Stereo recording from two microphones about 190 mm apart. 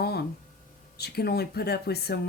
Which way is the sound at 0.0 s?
55° left (ahead or behind).